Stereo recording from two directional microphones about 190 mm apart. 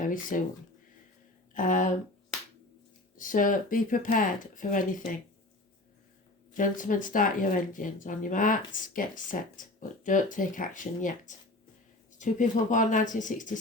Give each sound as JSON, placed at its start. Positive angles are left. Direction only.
{"t": 0.1, "sound": "speech", "side_deg": 45}
{"t": 1.5, "sound": "speech", "side_deg": 45}
{"t": 3.2, "sound": "speech", "side_deg": 45}
{"t": 6.5, "sound": "speech", "side_deg": 45}
{"t": 12.2, "sound": "speech", "side_deg": 45}